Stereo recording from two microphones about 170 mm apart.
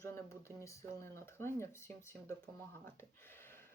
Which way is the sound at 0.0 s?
15° left (ahead or behind).